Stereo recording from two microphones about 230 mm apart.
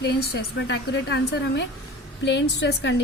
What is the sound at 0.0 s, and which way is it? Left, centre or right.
A woman's voice, left.